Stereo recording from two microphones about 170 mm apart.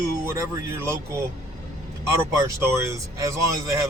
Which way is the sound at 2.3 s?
15° right (ahead or behind).